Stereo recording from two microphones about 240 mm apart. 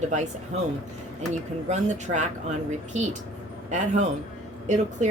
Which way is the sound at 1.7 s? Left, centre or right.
Right.